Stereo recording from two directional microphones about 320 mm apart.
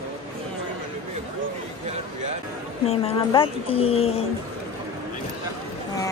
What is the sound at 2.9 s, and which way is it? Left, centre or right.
Speech, centre.